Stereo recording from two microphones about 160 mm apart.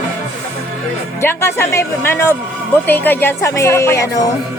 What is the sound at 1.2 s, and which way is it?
Speech, 15° left (ahead or behind).